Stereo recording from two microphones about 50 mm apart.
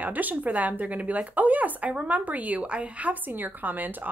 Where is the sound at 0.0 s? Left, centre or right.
Right.